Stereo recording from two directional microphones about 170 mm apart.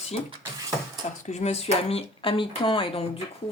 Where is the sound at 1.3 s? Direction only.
40° left (ahead or behind).